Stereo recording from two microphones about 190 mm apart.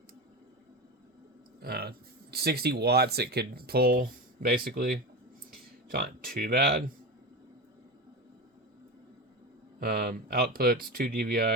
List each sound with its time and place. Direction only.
1.6 s speech: 55° right (ahead or behind)
9.8 s speech: 55° right (ahead or behind)